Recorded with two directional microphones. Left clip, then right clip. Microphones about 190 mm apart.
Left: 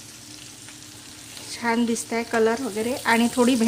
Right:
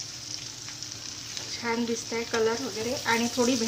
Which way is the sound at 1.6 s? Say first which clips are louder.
Left 6 dB; 50° left (ahead or behind).